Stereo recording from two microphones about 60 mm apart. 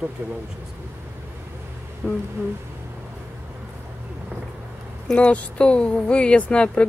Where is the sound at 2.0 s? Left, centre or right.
Centre.